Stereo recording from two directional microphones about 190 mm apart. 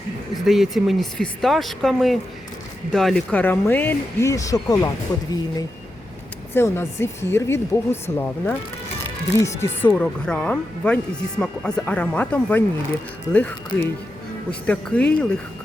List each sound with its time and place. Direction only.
0.4 s speech: centre (ahead or behind); by 4.9 s 20° left (ahead or behind)
6.5 s speech: 10° left (ahead or behind)